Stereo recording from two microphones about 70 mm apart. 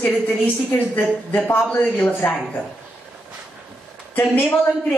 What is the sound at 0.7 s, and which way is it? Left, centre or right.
A woman's voice, left.